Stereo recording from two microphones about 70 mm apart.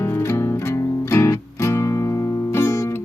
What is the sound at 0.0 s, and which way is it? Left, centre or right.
Music, left.